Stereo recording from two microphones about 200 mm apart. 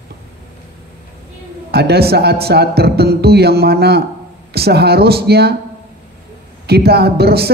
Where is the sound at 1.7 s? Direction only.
55° right (ahead or behind).